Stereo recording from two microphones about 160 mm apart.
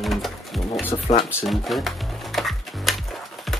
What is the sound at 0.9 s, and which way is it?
Speech, 35° left (ahead or behind).